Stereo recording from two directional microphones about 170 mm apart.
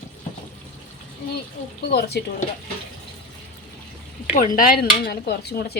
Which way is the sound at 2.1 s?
75° left (ahead or behind).